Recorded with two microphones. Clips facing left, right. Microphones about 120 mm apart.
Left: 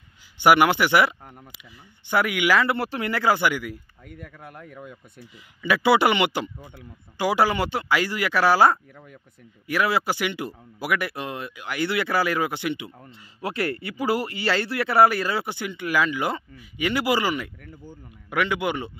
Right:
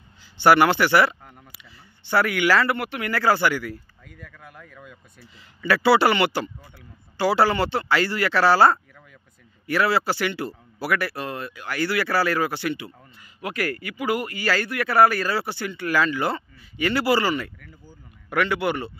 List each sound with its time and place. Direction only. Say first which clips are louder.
0.4 s speech: right 1 dB; 15° left (ahead or behind)
2.7 s speech: left 1 dB; 30° left (ahead or behind)
3.1 s speech: right 2 dB; 15° left (ahead or behind)
4.6 s speech: left 5 dB; 25° left (ahead or behind)
5.2 s speech: right 1 dB; 15° left (ahead or behind)
13.0 s speech: left 2 dB; 30° left (ahead or behind); by 18.9 s 15° left (ahead or behind)